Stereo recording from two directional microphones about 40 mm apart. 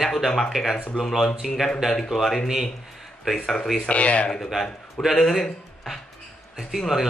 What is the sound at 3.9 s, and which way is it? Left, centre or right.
Speech, left.